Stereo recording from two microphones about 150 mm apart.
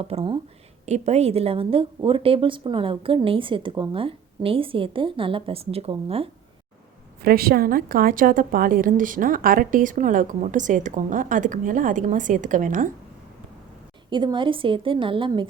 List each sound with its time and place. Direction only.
0.0 s a woman's voice: 40° right (ahead or behind)
7.3 s a woman's voice: 85° right; by 12.9 s 60° right (ahead or behind)
14.1 s a woman's voice: 30° right (ahead or behind)